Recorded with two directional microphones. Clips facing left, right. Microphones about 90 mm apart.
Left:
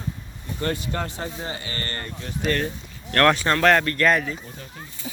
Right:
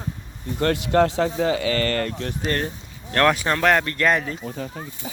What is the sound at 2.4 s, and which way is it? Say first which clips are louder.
Speech: left 2 dB; 30° right (ahead or behind).